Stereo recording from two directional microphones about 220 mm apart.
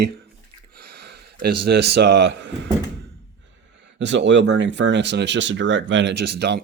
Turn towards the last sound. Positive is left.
turn(degrees=-50)  # may be behind; listen again after turning